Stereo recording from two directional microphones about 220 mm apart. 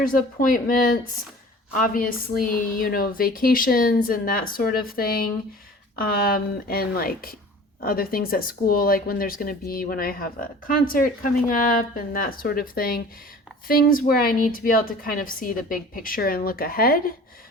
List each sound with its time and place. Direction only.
0.0 s a woman's voice: 40° left (ahead or behind)